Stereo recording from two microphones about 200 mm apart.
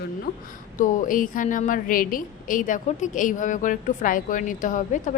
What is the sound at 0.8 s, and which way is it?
A woman's voice, 40° left (ahead or behind).